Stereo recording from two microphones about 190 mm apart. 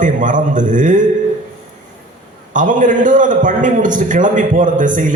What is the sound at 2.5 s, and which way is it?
A man's voice, 40° right (ahead or behind).